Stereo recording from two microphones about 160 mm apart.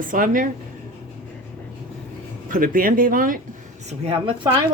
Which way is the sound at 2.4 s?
60° right (ahead or behind).